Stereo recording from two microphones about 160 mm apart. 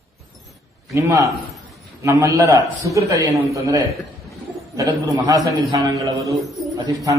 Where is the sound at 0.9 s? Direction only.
20° right (ahead or behind).